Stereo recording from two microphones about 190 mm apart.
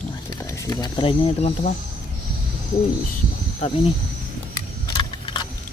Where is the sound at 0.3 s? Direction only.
15° left (ahead or behind).